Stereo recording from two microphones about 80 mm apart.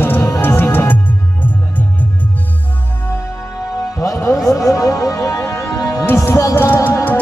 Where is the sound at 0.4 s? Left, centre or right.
Left.